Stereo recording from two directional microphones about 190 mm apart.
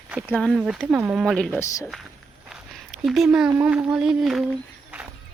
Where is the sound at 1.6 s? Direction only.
15° left (ahead or behind).